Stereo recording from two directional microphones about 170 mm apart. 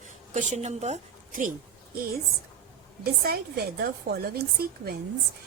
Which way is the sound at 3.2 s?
65° right (ahead or behind).